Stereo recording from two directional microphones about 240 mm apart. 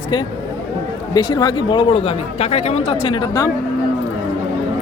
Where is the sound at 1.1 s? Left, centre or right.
Centre.